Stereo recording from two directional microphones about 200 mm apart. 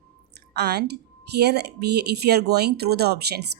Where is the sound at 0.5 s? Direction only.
55° right (ahead or behind).